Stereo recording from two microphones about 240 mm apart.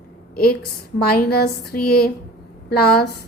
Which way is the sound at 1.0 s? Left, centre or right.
Left.